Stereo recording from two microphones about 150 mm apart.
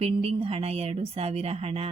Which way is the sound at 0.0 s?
40° right (ahead or behind).